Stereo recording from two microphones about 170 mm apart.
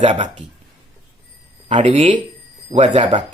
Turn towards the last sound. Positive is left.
turn(degrees=-30)  # may be behind; listen again after turning